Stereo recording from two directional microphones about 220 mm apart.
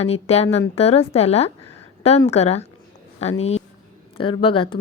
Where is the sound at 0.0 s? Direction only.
30° left (ahead or behind).